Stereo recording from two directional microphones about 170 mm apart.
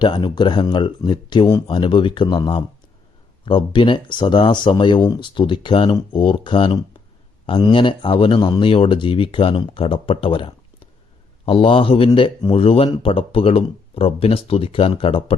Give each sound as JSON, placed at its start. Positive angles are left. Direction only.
{"t": 0.0, "sound": "speech", "side_deg": 30}